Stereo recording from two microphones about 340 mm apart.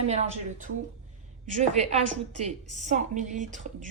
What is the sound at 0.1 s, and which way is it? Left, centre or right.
Speech, right.